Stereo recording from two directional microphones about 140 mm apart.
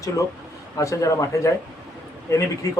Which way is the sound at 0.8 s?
20° left (ahead or behind).